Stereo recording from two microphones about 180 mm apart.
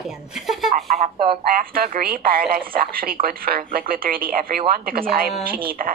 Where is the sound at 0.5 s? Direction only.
Centre (ahead or behind).